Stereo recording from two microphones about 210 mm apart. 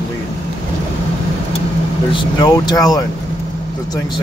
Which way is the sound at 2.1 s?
20° left (ahead or behind).